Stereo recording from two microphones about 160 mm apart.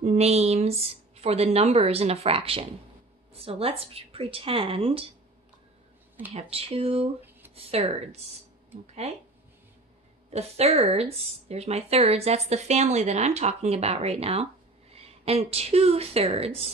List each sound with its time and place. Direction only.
0.0 s a woman's voice: 40° right (ahead or behind)
6.3 s a woman's voice: 40° right (ahead or behind)
10.3 s a woman's voice: 40° right (ahead or behind)